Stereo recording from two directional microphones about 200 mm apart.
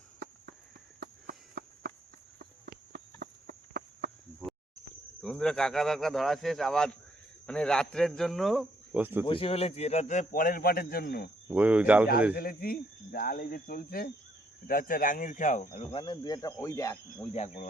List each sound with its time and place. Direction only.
0.9 s a sound: 55° right (ahead or behind)
2.4 s cricket: 50° right (ahead or behind)
5.2 s speech: 5° left (ahead or behind)
9.2 s a man's voice: 25° left (ahead or behind); by 11.3 s 50° left (ahead or behind)
11.4 s speech: 5° right (ahead or behind)
12.4 s a man's voice: 45° left (ahead or behind)
15.9 s speech: 25° left (ahead or behind)
17.3 s a man's voice: 35° left (ahead or behind)